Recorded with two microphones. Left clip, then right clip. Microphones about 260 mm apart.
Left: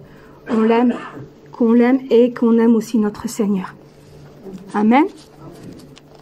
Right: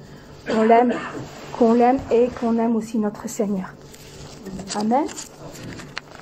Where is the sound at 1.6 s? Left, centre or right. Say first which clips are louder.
Left 2 dB; left.